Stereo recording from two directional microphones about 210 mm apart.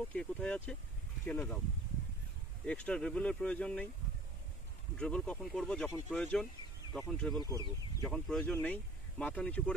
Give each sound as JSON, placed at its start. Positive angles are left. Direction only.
{"t": 0.1, "sound": "speech", "side_deg": 5}
{"t": 2.6, "sound": "speech", "side_deg": 5}
{"t": 4.9, "sound": "speech", "side_deg": 5}
{"t": 7.4, "sound": "speech", "side_deg": 15}
{"t": 8.0, "sound": "speech", "side_deg": 5}